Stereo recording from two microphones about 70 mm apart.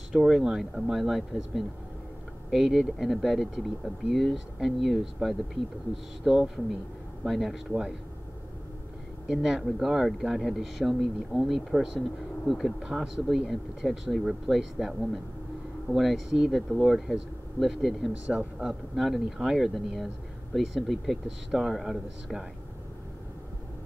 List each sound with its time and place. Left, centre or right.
0.2 s speech: centre
9.3 s speech: centre
18.2 s speech: centre
18.6 s speech: centre